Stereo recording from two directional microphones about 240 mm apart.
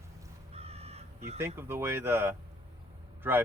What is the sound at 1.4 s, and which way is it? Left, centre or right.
Speech, centre.